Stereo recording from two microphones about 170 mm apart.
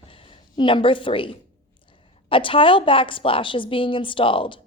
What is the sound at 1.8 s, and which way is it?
A woman's voice, 30° left (ahead or behind).